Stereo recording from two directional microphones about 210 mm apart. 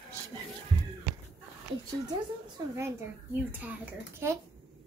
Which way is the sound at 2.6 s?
20° right (ahead or behind).